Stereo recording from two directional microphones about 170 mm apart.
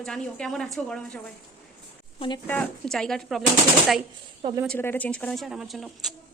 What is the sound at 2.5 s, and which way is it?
Speech, 5° left (ahead or behind).